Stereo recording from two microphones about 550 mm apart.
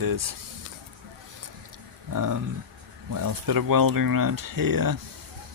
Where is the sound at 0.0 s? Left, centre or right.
Right.